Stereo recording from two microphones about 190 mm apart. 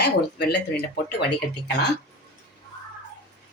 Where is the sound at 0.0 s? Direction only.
60° left (ahead or behind).